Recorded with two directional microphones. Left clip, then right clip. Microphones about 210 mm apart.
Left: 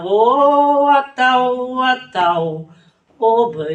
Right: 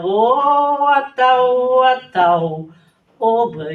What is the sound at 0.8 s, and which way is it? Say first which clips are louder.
Speech: even; 35° left (ahead or behind).